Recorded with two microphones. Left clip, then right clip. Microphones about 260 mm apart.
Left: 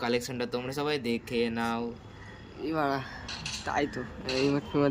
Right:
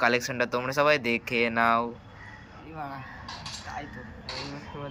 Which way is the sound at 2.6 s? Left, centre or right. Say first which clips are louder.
Left 14 dB; centre.